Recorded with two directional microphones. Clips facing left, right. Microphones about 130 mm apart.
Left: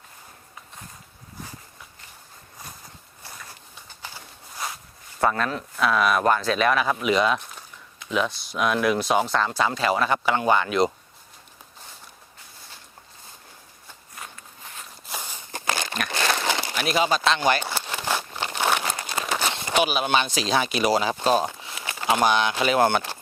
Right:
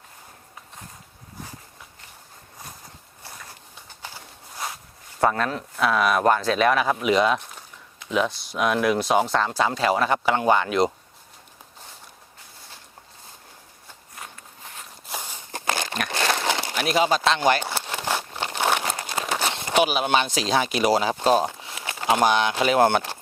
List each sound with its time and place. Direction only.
3.2 s clip-clop: 30° right (ahead or behind)
4.0 s walk: 35° right (ahead or behind)
5.2 s speech: 35° right (ahead or behind)
9.0 s speech: 30° right (ahead or behind)
14.2 s walk: 35° right (ahead or behind)
15.8 s crumpling: 45° right (ahead or behind)
17.1 s speech: 45° right (ahead or behind)
17.9 s a sound: 40° right (ahead or behind)
18.3 s crumpling: 45° right (ahead or behind)
19.0 s speech: 45° right (ahead or behind)
21.3 s speech: 30° right (ahead or behind); by 22.6 s 50° right (ahead or behind)
22.6 s speech: 35° right (ahead or behind)